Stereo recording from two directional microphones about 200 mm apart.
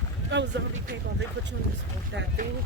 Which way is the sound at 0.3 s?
65° right (ahead or behind).